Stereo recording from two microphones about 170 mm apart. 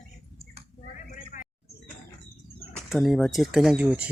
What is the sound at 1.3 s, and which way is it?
Bird, 50° left (ahead or behind).